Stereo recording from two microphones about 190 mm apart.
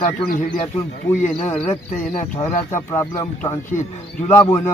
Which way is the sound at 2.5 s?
40° left (ahead or behind).